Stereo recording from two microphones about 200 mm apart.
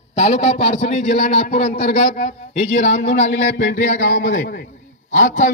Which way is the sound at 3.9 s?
45° left (ahead or behind).